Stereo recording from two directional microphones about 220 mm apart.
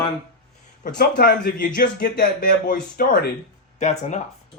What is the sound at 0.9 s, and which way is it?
Speech, 45° left (ahead or behind).